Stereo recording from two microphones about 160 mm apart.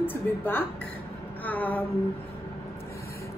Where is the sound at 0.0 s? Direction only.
10° left (ahead or behind).